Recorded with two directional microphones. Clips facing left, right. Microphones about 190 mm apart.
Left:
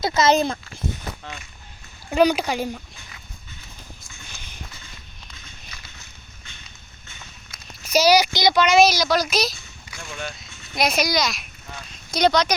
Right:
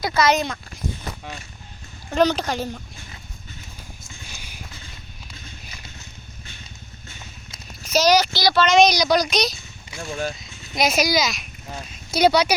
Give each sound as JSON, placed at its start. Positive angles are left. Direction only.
{"t": 0.0, "sound": "speech", "side_deg": 25}
{"t": 2.0, "sound": "a child's voice", "side_deg": 10}
{"t": 4.4, "sound": "horse", "side_deg": -10}
{"t": 7.9, "sound": "a child's voice", "side_deg": 10}
{"t": 9.9, "sound": "speech", "side_deg": -35}
{"t": 10.3, "sound": "speech", "side_deg": 0}